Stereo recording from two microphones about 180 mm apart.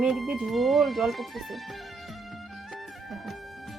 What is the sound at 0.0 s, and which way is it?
Music, centre (ahead or behind).